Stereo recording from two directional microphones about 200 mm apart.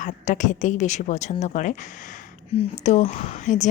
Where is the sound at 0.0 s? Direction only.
40° left (ahead or behind).